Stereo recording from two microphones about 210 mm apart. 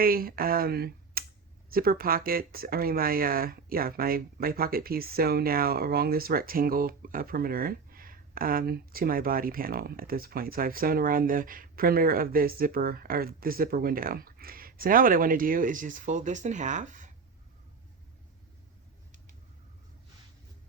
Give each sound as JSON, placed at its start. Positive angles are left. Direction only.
{"t": 0.0, "sound": "speech", "side_deg": -45}